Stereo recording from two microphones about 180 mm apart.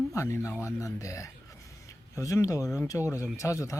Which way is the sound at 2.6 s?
Centre (ahead or behind).